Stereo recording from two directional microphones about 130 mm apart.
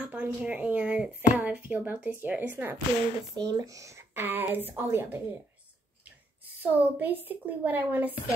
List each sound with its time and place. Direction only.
0.0 s speech: 10° right (ahead or behind)
3.3 s speech: 25° right (ahead or behind)
6.6 s speech: 15° right (ahead or behind)